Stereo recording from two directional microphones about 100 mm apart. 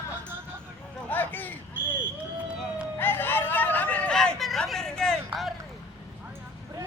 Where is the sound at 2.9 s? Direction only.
20° left (ahead or behind); by 4.9 s 5° left (ahead or behind).